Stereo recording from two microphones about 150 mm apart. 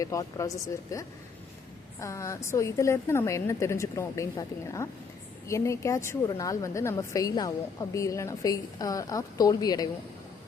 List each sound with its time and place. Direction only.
0.0 s speech: 20° left (ahead or behind)